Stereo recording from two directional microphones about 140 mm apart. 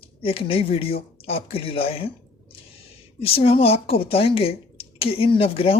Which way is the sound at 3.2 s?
40° left (ahead or behind).